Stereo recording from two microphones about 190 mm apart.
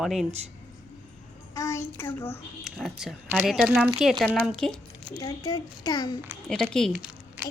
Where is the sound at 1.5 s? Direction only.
15° left (ahead or behind).